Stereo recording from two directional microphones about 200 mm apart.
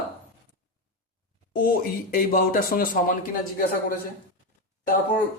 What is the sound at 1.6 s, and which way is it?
Speech, 45° left (ahead or behind).